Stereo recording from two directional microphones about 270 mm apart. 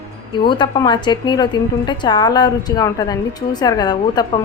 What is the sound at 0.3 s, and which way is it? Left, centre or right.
A woman's voice, centre.